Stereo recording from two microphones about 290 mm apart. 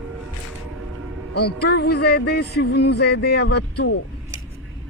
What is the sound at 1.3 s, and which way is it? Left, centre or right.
Speech, left.